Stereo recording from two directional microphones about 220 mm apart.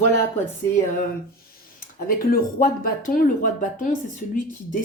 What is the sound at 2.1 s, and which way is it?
A woman's voice, 40° left (ahead or behind).